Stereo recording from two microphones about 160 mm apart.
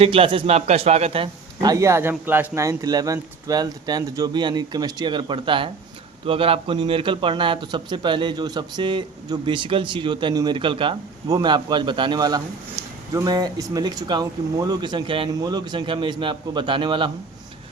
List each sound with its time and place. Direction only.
0.0 s speech: 35° right (ahead or behind)
1.7 s speech: 20° right (ahead or behind)